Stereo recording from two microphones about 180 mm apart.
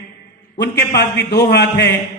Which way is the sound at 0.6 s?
65° left (ahead or behind).